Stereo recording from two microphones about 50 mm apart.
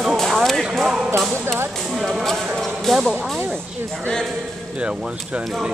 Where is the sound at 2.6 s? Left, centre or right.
Centre.